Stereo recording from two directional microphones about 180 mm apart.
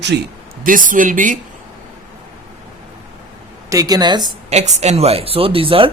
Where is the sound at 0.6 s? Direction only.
50° right (ahead or behind).